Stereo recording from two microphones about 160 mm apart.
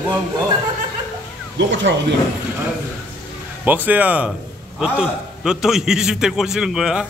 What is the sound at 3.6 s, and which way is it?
A man's voice, 10° right (ahead or behind).